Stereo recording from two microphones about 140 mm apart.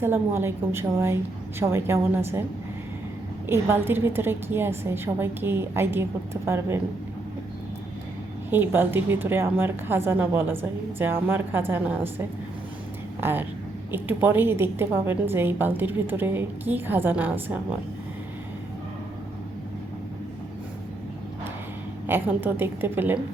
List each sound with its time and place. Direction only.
0.0 s a woman's voice: 15° right (ahead or behind)
3.4 s a woman's voice: 15° right (ahead or behind)
8.4 s a woman's voice: 15° right (ahead or behind)
13.1 s a woman's voice: 15° right (ahead or behind)
22.0 s a woman's voice: 15° right (ahead or behind)